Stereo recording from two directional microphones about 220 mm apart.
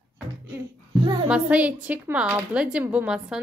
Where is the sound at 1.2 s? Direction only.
5° right (ahead or behind).